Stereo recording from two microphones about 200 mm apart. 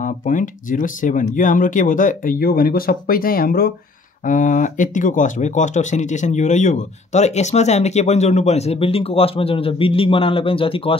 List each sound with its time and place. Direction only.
0.0 s speech: 40° left (ahead or behind)